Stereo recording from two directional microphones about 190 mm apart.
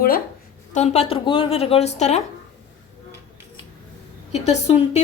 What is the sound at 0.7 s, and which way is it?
A woman's voice, 35° left (ahead or behind).